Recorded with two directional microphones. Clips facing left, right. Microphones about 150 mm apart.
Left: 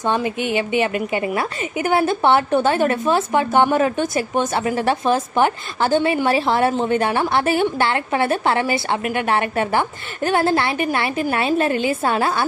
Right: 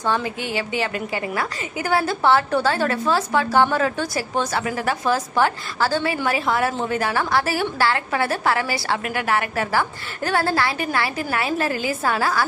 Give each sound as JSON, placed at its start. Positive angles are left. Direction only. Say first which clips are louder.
{"t": 0.0, "sound": "a woman's voice", "louder": "left 3 dB", "side_deg": 20}